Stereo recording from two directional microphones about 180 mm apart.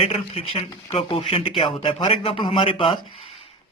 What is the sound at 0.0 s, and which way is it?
A man's voice, 35° left (ahead or behind).